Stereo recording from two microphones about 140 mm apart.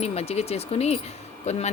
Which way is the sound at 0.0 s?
45° left (ahead or behind).